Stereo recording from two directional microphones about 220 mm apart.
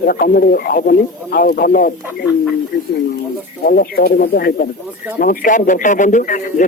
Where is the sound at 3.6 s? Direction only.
40° left (ahead or behind).